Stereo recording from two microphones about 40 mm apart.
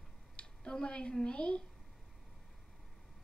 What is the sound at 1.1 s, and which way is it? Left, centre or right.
Speech, left.